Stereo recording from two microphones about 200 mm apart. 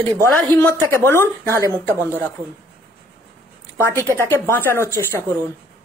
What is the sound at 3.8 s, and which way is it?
A woman's voice, 10° left (ahead or behind).